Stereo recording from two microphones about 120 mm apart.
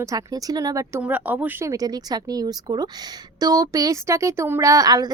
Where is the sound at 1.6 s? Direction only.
30° right (ahead or behind).